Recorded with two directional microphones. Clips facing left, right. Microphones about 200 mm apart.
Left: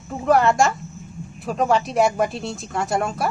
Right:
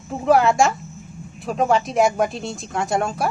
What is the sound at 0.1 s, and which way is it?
Speech, centre (ahead or behind).